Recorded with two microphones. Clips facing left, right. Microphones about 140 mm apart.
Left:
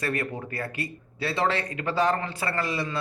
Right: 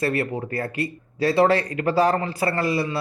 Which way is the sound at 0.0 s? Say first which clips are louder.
Right 6 dB; 30° right (ahead or behind).